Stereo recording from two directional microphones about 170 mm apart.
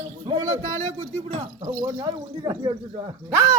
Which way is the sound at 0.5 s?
45° right (ahead or behind).